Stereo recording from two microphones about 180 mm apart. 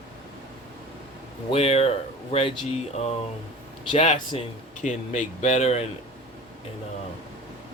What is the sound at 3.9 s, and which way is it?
Speech, 30° left (ahead or behind).